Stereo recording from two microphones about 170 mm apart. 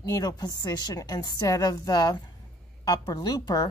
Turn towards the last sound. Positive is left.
turn(degrees=25)  # may be behind; listen again after turning